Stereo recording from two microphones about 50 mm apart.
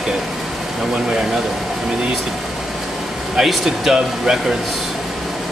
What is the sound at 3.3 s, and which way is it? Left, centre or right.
Speech, centre.